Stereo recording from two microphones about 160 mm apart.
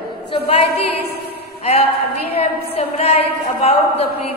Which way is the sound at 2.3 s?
40° left (ahead or behind).